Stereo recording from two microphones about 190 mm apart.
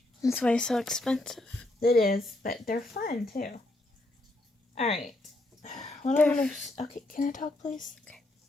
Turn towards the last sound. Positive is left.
turn(degrees=45)  # may be behind; listen again after turning